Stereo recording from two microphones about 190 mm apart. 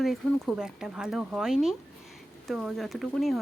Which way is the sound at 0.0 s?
Centre (ahead or behind).